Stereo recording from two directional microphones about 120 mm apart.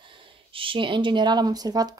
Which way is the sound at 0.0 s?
45° right (ahead or behind).